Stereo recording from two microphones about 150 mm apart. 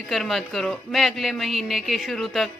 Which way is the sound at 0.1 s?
Centre (ahead or behind).